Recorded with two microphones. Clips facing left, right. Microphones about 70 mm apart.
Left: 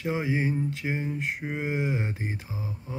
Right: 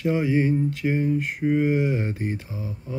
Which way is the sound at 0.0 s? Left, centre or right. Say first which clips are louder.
Right 6 dB; centre.